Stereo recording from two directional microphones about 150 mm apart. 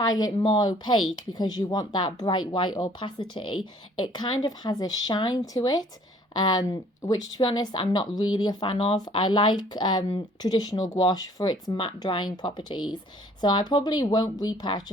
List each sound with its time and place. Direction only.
0.0 s speech: 25° left (ahead or behind)